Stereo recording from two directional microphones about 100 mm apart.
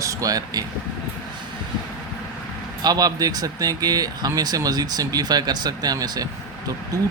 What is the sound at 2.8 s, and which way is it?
Speech, 40° right (ahead or behind).